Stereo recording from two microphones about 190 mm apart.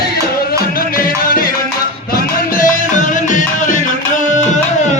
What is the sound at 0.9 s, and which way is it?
Music, 50° left (ahead or behind).